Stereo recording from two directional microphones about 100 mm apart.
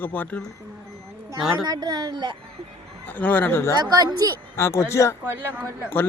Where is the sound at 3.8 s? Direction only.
40° right (ahead or behind).